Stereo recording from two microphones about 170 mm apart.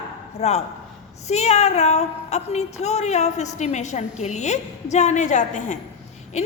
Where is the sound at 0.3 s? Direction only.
40° left (ahead or behind).